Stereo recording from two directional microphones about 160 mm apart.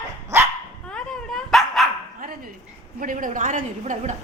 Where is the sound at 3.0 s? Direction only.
55° right (ahead or behind).